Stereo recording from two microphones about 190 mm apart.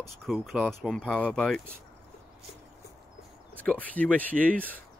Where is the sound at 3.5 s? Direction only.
5° left (ahead or behind).